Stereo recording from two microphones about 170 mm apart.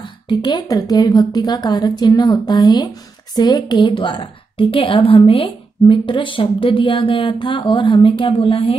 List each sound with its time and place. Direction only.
0.3 s a woman's voice: 25° left (ahead or behind)